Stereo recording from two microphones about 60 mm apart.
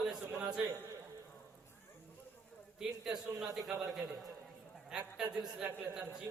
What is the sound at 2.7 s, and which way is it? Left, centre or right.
Speech, centre.